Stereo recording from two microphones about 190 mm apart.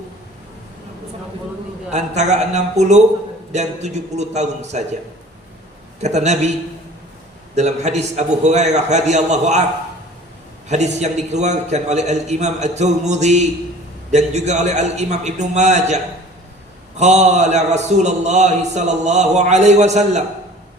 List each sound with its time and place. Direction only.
1.9 s a man's voice: 35° right (ahead or behind)
6.0 s a man's voice: 35° right (ahead or behind)
7.5 s a man's voice: 35° right (ahead or behind)
10.7 s a man's voice: 35° right (ahead or behind)
17.0 s a man's voice: 35° right (ahead or behind)